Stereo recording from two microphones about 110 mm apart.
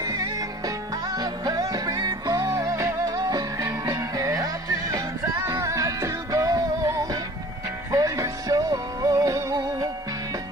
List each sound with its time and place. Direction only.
0.0 s music: 35° right (ahead or behind)